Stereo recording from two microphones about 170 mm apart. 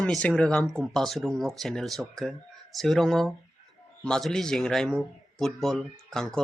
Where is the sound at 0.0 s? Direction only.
5° left (ahead or behind).